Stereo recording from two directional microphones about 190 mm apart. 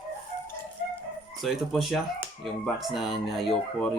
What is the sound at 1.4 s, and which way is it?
Speech, centre (ahead or behind).